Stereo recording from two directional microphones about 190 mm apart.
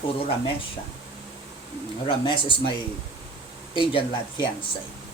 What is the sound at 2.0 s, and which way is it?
Speech, 25° left (ahead or behind).